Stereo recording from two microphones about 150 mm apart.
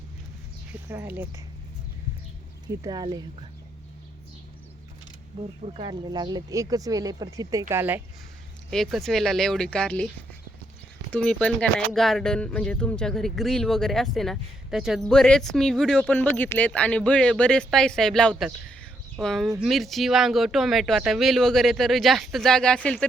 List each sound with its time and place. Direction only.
0.9 s speech: 15° right (ahead or behind)
2.6 s speech: 25° right (ahead or behind)
5.4 s speech: 40° right (ahead or behind)
5.9 s speech: 30° right (ahead or behind)
8.7 s speech: centre (ahead or behind)
11.1 s speech: 5° left (ahead or behind)